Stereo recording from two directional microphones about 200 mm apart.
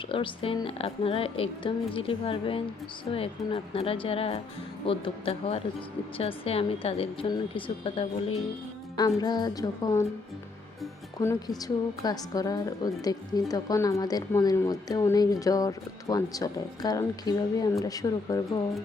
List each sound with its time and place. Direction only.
0.1 s a woman's voice: 25° left (ahead or behind)
11.2 s a woman's voice: 15° left (ahead or behind)